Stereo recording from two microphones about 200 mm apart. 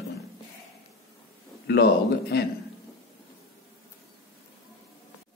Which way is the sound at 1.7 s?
55° left (ahead or behind).